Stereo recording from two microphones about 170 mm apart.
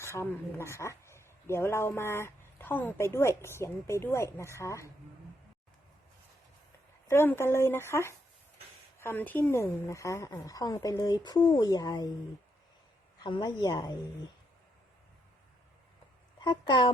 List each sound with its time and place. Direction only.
0.0 s speech: 15° left (ahead or behind)
7.1 s a woman's voice: 15° left (ahead or behind)
13.2 s a woman's voice: 25° left (ahead or behind)
16.4 s a woman's voice: 25° left (ahead or behind)